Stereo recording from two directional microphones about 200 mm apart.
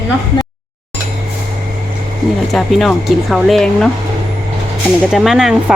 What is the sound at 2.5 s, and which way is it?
Speech, centre (ahead or behind).